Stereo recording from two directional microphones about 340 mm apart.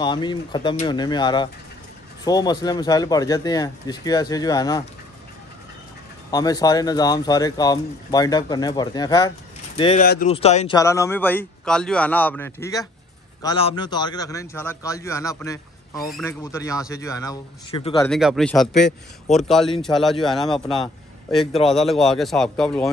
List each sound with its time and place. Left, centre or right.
0.0 s a man's voice: centre
6.3 s a man's voice: centre